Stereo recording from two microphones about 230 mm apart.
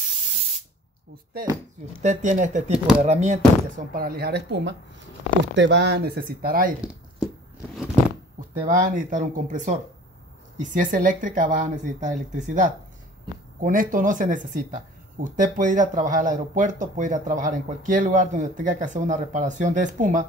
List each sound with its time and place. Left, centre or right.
2.0 s speech: right
8.4 s speech: right